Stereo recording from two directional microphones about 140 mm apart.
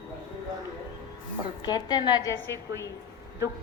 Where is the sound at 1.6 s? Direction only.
30° left (ahead or behind).